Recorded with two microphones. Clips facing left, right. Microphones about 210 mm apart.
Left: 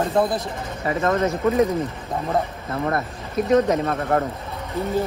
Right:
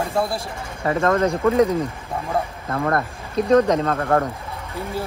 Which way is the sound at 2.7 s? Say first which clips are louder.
Right 2 dB; 55° right (ahead or behind).